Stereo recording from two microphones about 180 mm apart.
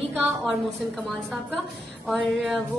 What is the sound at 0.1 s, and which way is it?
Speech, 5° right (ahead or behind).